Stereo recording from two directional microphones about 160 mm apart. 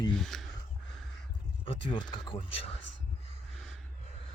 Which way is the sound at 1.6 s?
30° left (ahead or behind).